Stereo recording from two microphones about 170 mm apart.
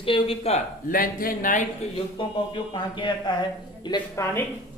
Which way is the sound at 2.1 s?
30° left (ahead or behind).